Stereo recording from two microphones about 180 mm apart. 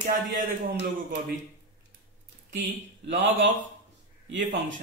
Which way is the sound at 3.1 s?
90° right.